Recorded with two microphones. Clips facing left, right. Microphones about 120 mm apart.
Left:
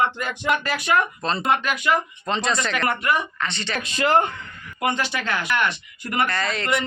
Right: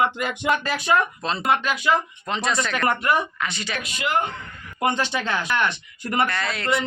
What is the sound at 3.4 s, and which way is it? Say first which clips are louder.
Speech: left 1 dB; 5° right (ahead or behind).